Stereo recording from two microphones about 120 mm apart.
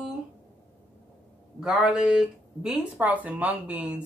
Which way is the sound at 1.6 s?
5° right (ahead or behind).